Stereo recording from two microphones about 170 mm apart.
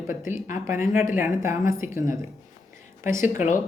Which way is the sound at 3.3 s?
45° left (ahead or behind).